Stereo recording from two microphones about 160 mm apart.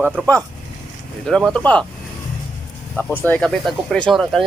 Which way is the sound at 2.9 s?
10° left (ahead or behind).